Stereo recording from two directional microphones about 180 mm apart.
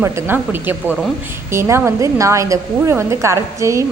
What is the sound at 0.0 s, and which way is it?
A woman's voice, 10° right (ahead or behind).